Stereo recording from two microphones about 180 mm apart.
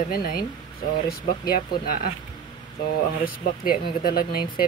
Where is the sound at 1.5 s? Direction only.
55° left (ahead or behind).